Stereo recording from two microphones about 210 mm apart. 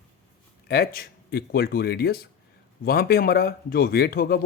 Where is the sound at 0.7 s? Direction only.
45° left (ahead or behind).